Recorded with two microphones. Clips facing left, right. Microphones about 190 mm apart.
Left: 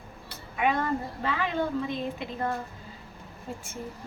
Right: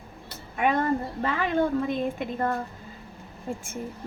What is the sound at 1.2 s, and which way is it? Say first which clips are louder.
A woman's voice: right 4 dB; 50° right (ahead or behind).